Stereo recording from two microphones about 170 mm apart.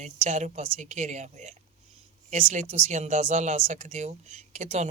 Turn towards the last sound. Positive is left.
turn(degrees=-40)  # may be behind; listen again after turning